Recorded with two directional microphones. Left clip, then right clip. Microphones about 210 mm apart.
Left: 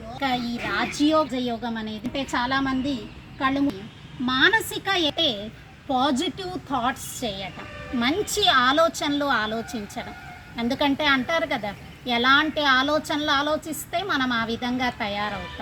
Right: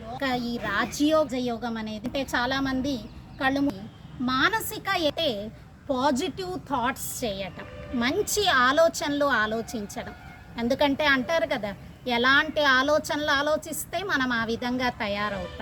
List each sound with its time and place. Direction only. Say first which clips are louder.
0.2 s a woman's voice: left 3 dB; 20° right (ahead or behind)
1.3 s a woman's voice: left 2 dB; 10° left (ahead or behind)
2.1 s a woman's voice: left 2 dB; 25° right (ahead or behind)